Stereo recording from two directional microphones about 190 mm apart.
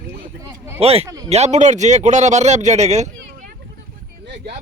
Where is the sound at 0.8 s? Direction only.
30° right (ahead or behind).